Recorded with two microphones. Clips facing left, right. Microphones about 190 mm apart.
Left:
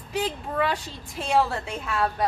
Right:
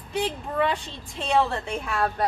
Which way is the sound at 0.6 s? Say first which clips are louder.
Right 1 dB; 5° left (ahead or behind).